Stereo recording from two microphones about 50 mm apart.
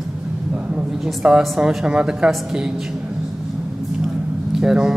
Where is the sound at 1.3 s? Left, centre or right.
Centre.